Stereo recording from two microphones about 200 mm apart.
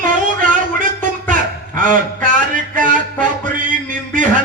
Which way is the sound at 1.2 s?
40° right (ahead or behind).